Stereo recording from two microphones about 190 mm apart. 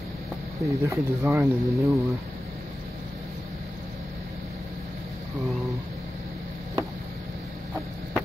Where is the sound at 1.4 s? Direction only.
Centre (ahead or behind).